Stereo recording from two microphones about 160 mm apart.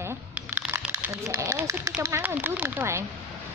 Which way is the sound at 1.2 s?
20° right (ahead or behind).